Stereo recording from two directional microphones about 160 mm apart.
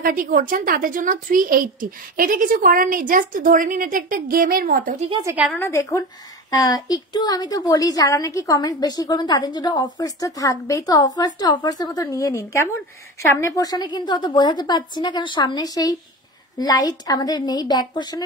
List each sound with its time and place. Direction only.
0.0 s a woman's voice: 60° right (ahead or behind)
5.2 s a woman's voice: 10° right (ahead or behind)
5.5 s a woman's voice: 15° left (ahead or behind)